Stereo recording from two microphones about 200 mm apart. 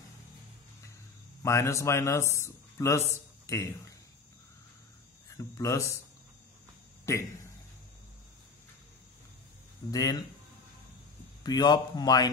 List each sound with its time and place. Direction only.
1.4 s a man's voice: 15° left (ahead or behind)
5.4 s speech: 15° left (ahead or behind)
7.1 s speech: 15° left (ahead or behind)
9.8 s speech: 20° left (ahead or behind)
11.4 s speech: 20° left (ahead or behind)